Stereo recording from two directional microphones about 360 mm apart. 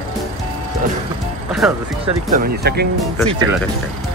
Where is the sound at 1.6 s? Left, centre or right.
Centre.